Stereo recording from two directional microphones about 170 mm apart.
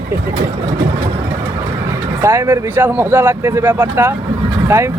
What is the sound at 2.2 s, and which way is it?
Speech, 15° right (ahead or behind).